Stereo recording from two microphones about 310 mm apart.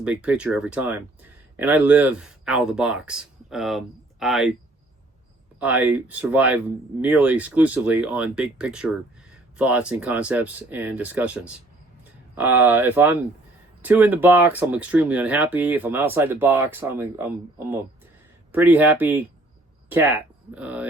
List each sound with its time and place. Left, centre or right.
0.0 s speech: centre
5.5 s speech: centre